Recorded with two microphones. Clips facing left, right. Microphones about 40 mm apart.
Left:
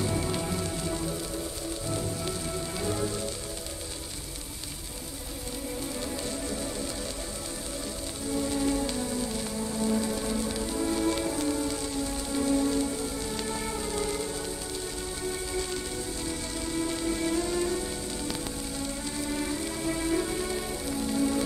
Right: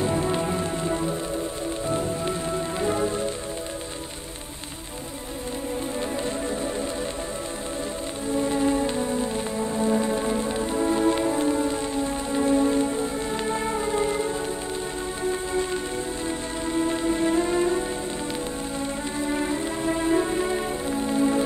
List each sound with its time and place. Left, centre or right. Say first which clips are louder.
0.0 s music: right 6 dB; right
5.9 s music: right 6 dB; right
8.3 s music: right 5 dB; right